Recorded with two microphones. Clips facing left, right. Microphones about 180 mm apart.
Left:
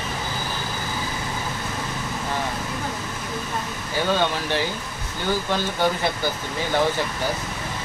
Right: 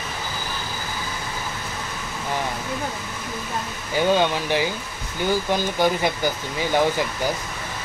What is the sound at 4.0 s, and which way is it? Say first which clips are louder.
Speech: right 4 dB; 15° right (ahead or behind).